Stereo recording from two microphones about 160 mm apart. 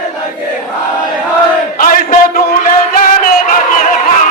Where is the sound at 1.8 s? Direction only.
60° left (ahead or behind).